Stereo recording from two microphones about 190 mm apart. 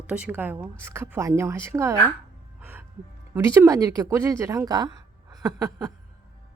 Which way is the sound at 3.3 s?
15° right (ahead or behind).